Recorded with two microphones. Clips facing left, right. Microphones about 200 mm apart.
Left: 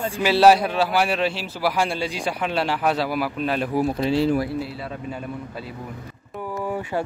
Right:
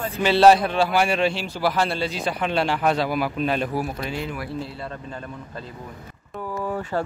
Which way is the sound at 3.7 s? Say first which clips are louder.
Left 6 dB; 25° left (ahead or behind).